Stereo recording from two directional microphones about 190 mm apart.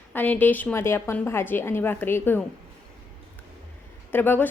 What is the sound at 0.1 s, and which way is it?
A woman's voice, 10° left (ahead or behind).